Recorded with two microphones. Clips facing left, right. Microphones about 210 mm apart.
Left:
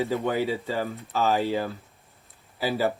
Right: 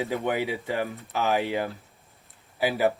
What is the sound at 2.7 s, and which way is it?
Speech, 15° right (ahead or behind).